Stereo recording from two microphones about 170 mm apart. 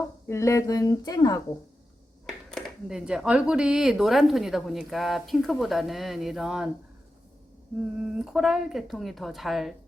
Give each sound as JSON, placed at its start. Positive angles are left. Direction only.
{"t": 0.3, "sound": "speech", "side_deg": 15}
{"t": 2.2, "sound": "speech", "side_deg": 5}
{"t": 8.0, "sound": "speech", "side_deg": 0}